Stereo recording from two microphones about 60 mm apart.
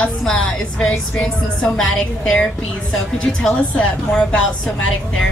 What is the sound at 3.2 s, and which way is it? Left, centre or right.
A woman's voice, centre.